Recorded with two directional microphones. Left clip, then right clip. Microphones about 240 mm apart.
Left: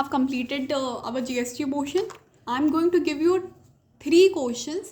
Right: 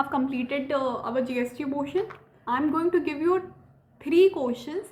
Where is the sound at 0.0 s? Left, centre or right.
Left.